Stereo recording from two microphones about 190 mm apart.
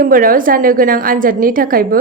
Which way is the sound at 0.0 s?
50° right (ahead or behind).